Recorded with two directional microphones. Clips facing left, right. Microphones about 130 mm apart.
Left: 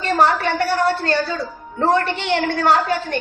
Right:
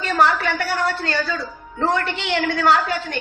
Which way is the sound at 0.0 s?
35° left (ahead or behind).